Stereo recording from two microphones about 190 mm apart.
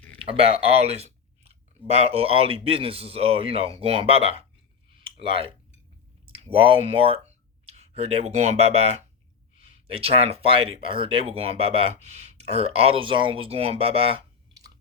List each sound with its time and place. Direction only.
0.2 s speech: 30° right (ahead or behind)